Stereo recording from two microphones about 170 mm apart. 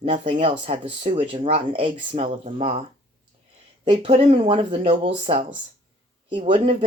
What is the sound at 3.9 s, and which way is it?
Speech, 35° right (ahead or behind).